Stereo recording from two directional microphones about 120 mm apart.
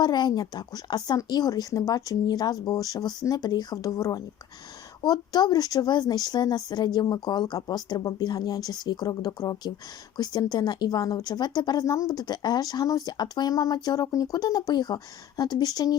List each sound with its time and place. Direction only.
0.0 s speech: 35° left (ahead or behind)